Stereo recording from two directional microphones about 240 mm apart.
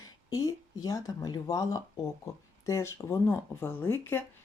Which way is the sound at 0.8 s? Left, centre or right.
Centre.